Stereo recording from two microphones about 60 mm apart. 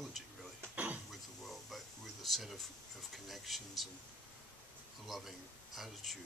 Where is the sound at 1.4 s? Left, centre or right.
Centre.